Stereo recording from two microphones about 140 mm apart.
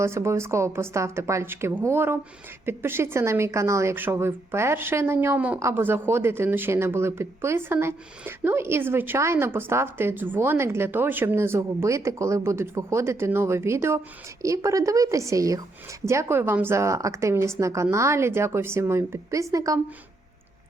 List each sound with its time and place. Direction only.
0.0 s a woman's voice: 20° right (ahead or behind)